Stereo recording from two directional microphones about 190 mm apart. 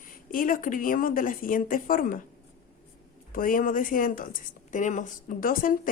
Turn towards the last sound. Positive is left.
turn(degrees=45)  # may be behind; listen again after turning